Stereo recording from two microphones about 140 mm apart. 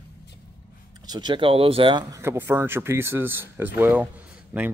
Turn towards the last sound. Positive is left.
turn(degrees=-10)  # may be behind; listen again after turning